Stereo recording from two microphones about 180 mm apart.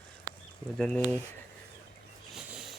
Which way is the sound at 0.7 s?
5° left (ahead or behind).